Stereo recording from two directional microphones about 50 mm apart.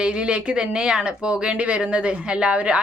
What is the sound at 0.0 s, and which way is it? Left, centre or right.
Speech, right.